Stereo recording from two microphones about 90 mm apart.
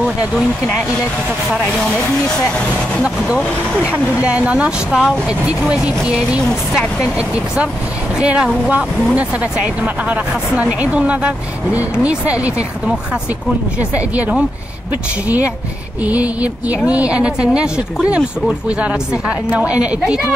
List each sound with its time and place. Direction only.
1.9 s speech: 10° left (ahead or behind)
3.0 s speech: 10° right (ahead or behind)
6.4 s speech: 5° left (ahead or behind)
7.0 s speech: 10° right (ahead or behind)